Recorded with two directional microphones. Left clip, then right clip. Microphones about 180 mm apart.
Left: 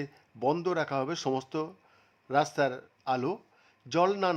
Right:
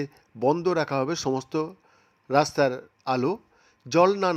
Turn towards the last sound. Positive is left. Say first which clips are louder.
# right 6 dB
turn(degrees=-20)  # may be behind; listen again after turning